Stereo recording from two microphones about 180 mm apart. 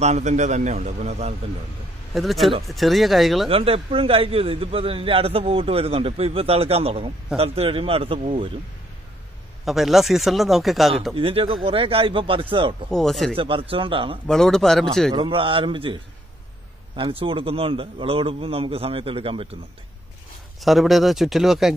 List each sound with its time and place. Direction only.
0.0 s a man's voice: 40° right (ahead or behind)
2.1 s speech: centre (ahead or behind)
3.4 s a man's voice: 30° right (ahead or behind)
9.7 s speech: centre (ahead or behind)
11.1 s speech: 30° right (ahead or behind)
12.9 s speech: centre (ahead or behind)
13.4 s speech: 30° right (ahead or behind)
14.2 s speech: 5° left (ahead or behind)
15.1 s a man's voice: 30° right (ahead or behind)
20.6 s speech: centre (ahead or behind)